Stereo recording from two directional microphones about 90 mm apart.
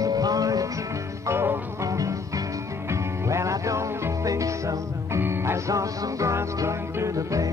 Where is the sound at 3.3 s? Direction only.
35° right (ahead or behind).